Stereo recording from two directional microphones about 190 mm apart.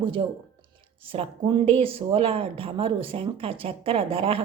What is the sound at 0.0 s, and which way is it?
Speech, 25° right (ahead or behind).